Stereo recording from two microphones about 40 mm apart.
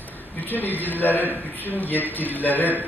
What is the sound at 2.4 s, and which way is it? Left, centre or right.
Speech, left.